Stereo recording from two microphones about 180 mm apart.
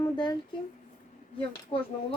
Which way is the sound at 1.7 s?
30° left (ahead or behind).